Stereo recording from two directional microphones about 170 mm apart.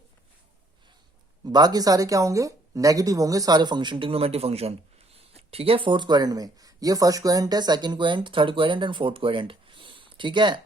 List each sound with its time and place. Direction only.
1.5 s speech: 25° right (ahead or behind)